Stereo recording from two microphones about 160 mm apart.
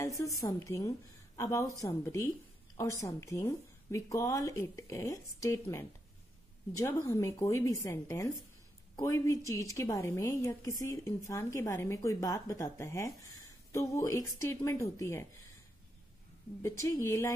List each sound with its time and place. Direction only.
0.0 s a woman's voice: 20° left (ahead or behind)
16.6 s a woman's voice: 20° left (ahead or behind)